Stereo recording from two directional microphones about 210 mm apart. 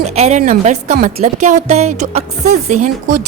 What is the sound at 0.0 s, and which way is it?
A woman's voice, 30° right (ahead or behind).